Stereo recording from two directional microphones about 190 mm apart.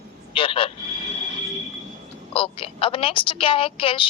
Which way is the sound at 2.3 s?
30° left (ahead or behind).